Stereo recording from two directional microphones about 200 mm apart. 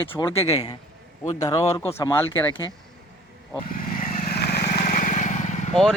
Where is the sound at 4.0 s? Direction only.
45° left (ahead or behind).